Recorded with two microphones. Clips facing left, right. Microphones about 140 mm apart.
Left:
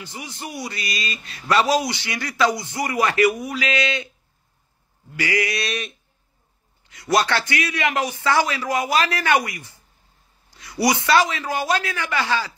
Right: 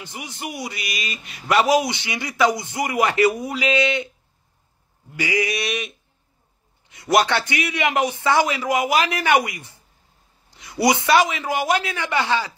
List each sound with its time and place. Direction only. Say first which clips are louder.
0.0 s a man's voice: right 1 dB; 20° right (ahead or behind)
5.2 s mantra: right 1 dB; 20° right (ahead or behind)
6.9 s a man's voice: right 2 dB; 20° right (ahead or behind)